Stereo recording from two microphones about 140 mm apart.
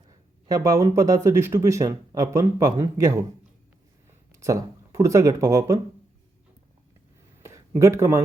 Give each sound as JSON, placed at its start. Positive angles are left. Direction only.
{"t": 0.4, "sound": "speech", "side_deg": -25}
{"t": 4.4, "sound": "speech", "side_deg": -20}
{"t": 7.4, "sound": "a sound", "side_deg": -20}